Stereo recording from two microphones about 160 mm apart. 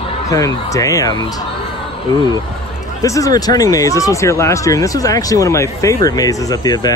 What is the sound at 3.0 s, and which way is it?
A man's voice, 20° left (ahead or behind).